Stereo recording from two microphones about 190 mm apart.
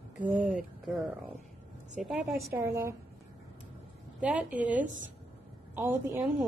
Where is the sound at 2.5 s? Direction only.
15° right (ahead or behind).